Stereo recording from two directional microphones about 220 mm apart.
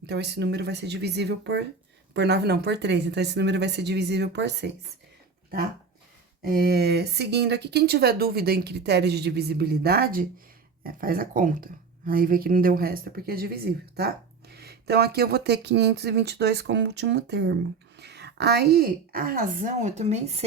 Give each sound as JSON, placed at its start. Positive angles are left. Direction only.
{"t": 0.1, "sound": "speech", "side_deg": -50}
{"t": 6.4, "sound": "speech", "side_deg": -45}